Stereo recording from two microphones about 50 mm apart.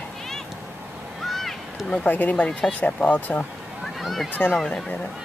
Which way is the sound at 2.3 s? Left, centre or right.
Centre.